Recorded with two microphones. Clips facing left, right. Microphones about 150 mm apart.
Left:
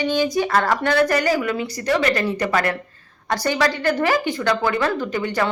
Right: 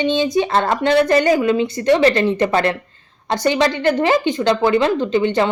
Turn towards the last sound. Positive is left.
turn(degrees=-25)  # may be behind; listen again after turning